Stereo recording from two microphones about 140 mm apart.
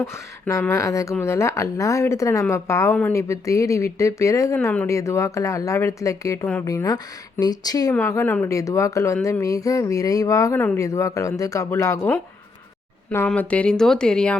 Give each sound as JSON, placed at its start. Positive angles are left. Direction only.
{"t": 0.0, "sound": "speech", "side_deg": 20}
{"t": 7.9, "sound": "speech", "side_deg": 15}
{"t": 13.1, "sound": "speech", "side_deg": 10}